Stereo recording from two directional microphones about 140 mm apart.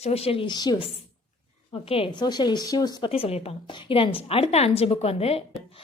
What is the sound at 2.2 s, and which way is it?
Speech, 30° left (ahead or behind).